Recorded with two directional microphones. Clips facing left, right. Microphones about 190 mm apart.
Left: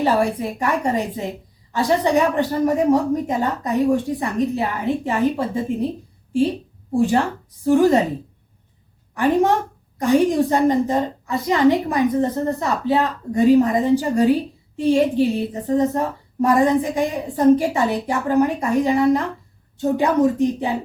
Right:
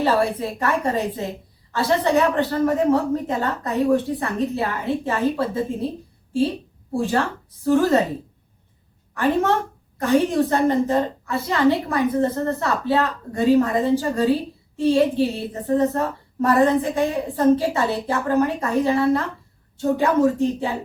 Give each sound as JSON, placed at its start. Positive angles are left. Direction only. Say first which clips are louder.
{"t": 0.0, "sound": "a woman's voice", "louder": "left 1 dB", "side_deg": 15}
{"t": 6.9, "sound": "a woman's voice", "louder": "left 4 dB", "side_deg": 15}
{"t": 9.1, "sound": "a woman's voice", "louder": "left 3 dB", "side_deg": 15}